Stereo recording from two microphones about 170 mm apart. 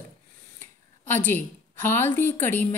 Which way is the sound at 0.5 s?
10° left (ahead or behind).